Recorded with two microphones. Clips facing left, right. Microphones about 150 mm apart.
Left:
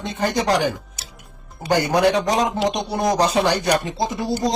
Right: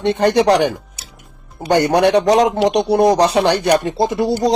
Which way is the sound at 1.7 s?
70° right (ahead or behind).